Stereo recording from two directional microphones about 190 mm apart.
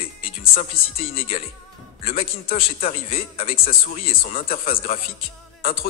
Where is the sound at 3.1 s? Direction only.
50° left (ahead or behind).